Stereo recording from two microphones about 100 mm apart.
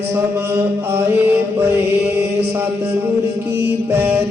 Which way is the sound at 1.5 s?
25° right (ahead or behind).